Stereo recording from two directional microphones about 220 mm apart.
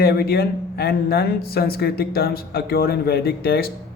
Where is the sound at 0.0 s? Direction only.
45° left (ahead or behind).